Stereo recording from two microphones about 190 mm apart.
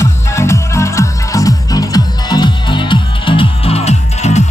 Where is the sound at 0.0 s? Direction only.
15° left (ahead or behind).